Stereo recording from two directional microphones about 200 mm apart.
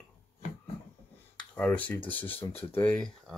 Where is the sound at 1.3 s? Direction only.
5° left (ahead or behind).